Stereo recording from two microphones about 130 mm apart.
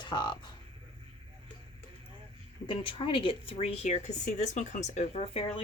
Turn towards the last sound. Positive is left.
turn(degrees=45)  # may be behind; listen again after turning